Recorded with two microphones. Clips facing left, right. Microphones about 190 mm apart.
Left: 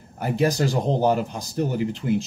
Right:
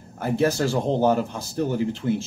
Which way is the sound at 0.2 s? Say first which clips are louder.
Even; 15° left (ahead or behind).